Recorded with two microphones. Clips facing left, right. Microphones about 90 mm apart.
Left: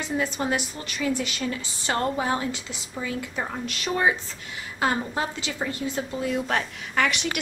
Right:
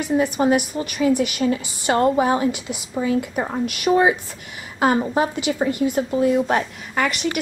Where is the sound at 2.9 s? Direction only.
30° right (ahead or behind).